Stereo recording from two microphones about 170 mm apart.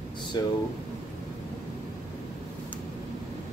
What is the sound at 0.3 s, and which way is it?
Speech, 25° left (ahead or behind).